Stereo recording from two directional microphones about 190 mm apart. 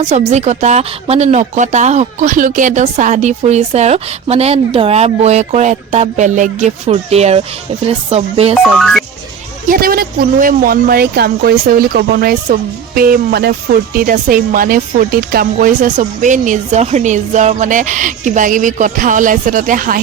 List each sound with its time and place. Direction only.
0.1 s speech: 35° right (ahead or behind)
8.5 s speech: centre (ahead or behind)
9.6 s speech: 50° right (ahead or behind)